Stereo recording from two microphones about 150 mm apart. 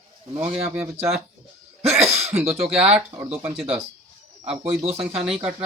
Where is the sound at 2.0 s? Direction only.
45° right (ahead or behind).